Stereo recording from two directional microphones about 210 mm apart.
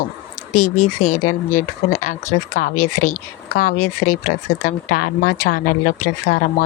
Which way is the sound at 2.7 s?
90° left.